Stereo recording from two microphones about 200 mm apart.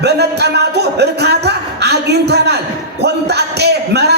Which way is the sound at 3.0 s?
55° right (ahead or behind).